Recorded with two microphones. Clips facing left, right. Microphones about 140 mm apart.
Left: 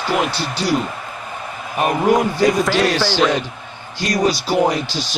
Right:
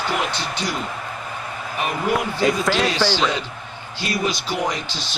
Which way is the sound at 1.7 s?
45° left (ahead or behind).